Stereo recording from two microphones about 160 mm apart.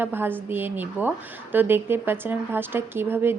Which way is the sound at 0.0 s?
15° right (ahead or behind).